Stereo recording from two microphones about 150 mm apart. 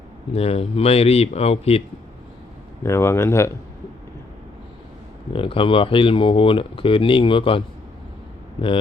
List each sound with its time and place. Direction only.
0.3 s speech: 40° left (ahead or behind)
2.8 s speech: 15° left (ahead or behind)
5.3 s speech: 35° left (ahead or behind)